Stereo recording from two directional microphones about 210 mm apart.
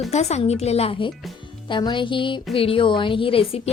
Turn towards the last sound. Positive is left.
turn(degrees=25)  # may be behind; listen again after turning